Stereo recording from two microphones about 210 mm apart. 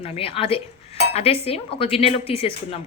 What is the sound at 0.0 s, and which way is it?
Speech, 25° left (ahead or behind).